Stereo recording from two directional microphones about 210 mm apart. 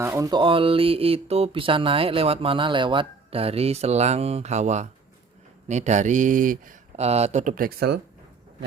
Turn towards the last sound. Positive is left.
turn(degrees=-50)  # may be behind; listen again after turning